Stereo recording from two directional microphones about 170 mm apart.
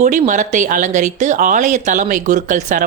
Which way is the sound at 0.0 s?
50° right (ahead or behind).